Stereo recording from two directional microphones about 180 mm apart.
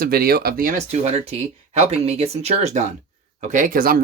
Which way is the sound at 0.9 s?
35° right (ahead or behind).